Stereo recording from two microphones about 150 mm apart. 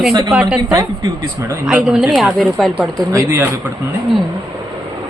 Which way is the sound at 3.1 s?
20° right (ahead or behind).